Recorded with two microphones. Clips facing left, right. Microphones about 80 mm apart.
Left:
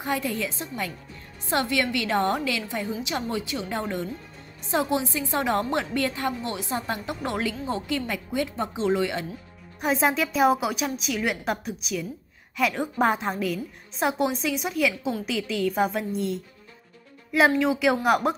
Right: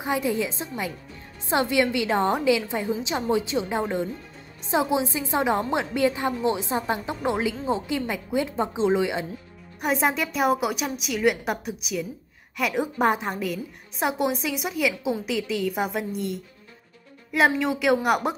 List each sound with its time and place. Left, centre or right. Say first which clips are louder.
0.0 s a woman's voice: right 3 dB; centre
9.8 s a woman's voice: even; centre